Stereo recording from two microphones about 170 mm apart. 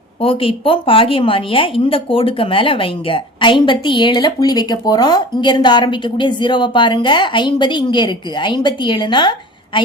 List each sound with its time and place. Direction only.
0.2 s a woman's voice: 35° left (ahead or behind)